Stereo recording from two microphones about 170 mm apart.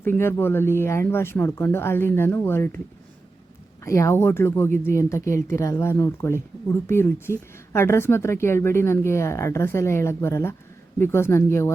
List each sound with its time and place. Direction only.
0.0 s speech: 15° left (ahead or behind)
3.8 s speech: 15° left (ahead or behind)